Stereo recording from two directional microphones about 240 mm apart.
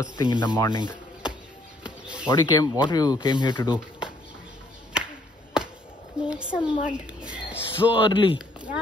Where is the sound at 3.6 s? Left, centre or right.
Centre.